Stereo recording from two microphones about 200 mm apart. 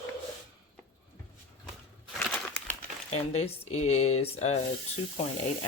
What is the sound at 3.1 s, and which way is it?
Speech, 30° left (ahead or behind).